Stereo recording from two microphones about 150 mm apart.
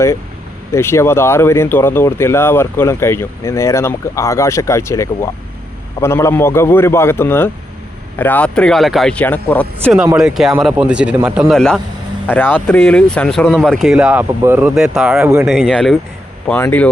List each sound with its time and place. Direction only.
0.7 s speech: 15° left (ahead or behind)
10.2 s speech: 5° right (ahead or behind)
16.5 s speech: 15° left (ahead or behind)